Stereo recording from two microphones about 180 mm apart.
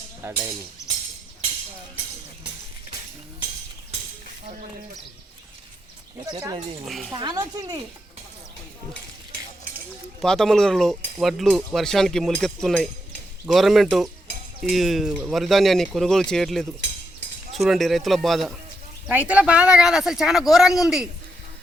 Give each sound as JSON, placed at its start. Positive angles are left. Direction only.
{"t": 0.2, "sound": "speech", "side_deg": -15}
{"t": 6.8, "sound": "cutlery", "side_deg": 0}
{"t": 7.1, "sound": "speech", "side_deg": -25}
{"t": 10.2, "sound": "cutlery", "side_deg": 0}